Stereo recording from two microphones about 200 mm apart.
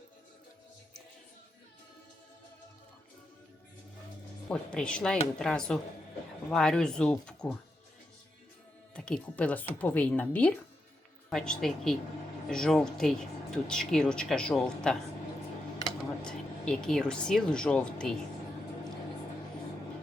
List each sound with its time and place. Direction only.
4.4 s speech: 5° left (ahead or behind)
9.0 s speech: 5° left (ahead or behind)